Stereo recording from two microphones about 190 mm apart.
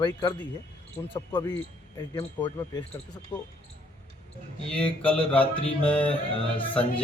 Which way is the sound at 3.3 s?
20° left (ahead or behind).